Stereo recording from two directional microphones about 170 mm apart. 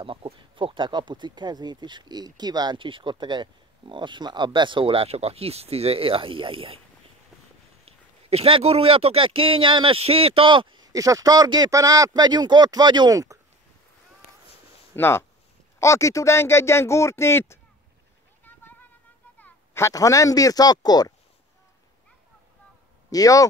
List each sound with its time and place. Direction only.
0.0 s speech: 30° right (ahead or behind)
7.8 s speech: 35° right (ahead or behind); by 13.4 s 20° right (ahead or behind)
15.0 s speech: 15° left (ahead or behind)
18.4 s a sound: 10° left (ahead or behind)
19.3 s speech: 10° left (ahead or behind)
23.0 s speech: 20° left (ahead or behind)